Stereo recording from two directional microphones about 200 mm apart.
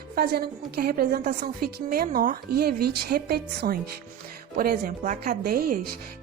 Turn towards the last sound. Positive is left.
turn(degrees=-45)  # may be behind; listen again after turning